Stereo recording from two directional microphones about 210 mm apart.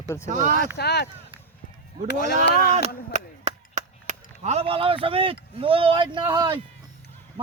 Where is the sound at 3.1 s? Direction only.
35° right (ahead or behind).